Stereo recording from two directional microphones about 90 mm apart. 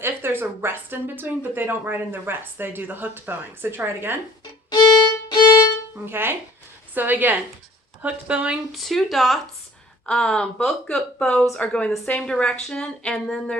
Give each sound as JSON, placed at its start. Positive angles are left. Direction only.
{"t": 0.0, "sound": "speech", "side_deg": -25}
{"t": 5.3, "sound": "violin", "side_deg": 50}
{"t": 6.1, "sound": "speech", "side_deg": -25}
{"t": 8.7, "sound": "a woman's voice", "side_deg": 0}